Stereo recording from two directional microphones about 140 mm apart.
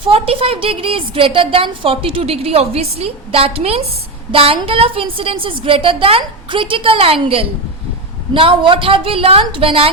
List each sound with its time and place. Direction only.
0.0 s a woman's voice: 40° right (ahead or behind)